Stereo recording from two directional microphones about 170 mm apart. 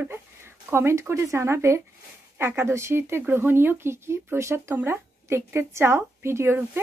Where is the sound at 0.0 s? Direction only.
15° right (ahead or behind).